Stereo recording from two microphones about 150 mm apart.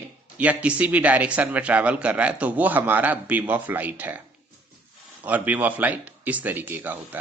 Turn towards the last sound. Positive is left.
turn(degrees=-10)  # may be behind; listen again after turning